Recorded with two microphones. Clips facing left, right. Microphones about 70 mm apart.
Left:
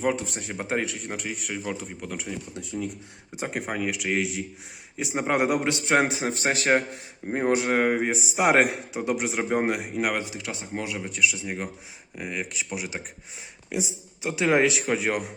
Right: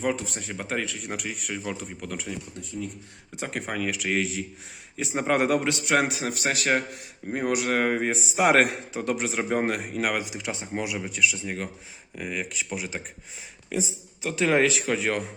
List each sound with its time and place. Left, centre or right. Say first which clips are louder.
0.0 s a man's voice: left 2 dB; centre
0.3 s a man's voice: left 2 dB; left
0.9 s a man's voice: even; centre
3.3 s a man's voice: left 1 dB; centre
3.8 s a man's voice: right 1 dB; centre; by 7.8 s left
7.8 s a man's voice: left 1 dB; centre
10.3 s speech: right 2 dB; right
10.8 s a man's voice: even; centre